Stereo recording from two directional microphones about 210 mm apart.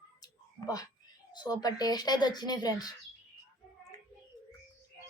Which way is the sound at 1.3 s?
20° left (ahead or behind).